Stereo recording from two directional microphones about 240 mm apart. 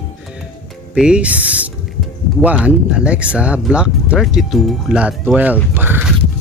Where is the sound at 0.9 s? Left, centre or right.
Centre.